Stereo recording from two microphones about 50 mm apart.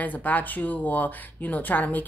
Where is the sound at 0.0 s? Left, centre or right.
Left.